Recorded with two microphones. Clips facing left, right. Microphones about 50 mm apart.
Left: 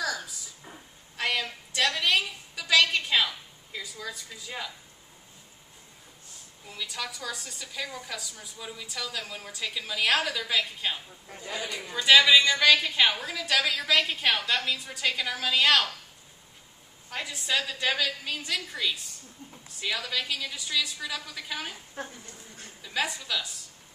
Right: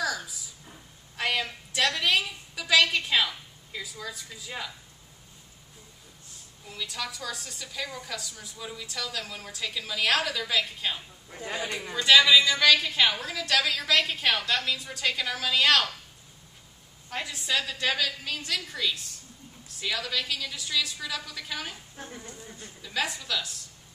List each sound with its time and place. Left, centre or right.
1.1 s a sound: centre
6.7 s a woman's voice: centre
11.3 s speech: right
11.9 s a woman's voice: centre
17.1 s a woman's voice: centre
22.1 s speech: right
22.8 s a woman's voice: centre